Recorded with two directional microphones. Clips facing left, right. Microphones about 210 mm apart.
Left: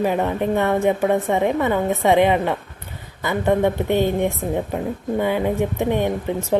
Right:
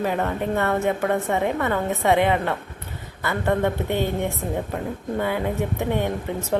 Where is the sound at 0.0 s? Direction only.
15° left (ahead or behind).